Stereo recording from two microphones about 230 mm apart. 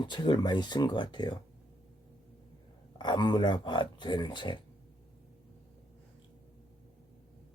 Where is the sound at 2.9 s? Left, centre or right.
Centre.